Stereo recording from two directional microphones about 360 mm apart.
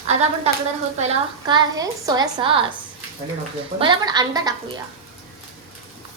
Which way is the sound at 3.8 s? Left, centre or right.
Centre.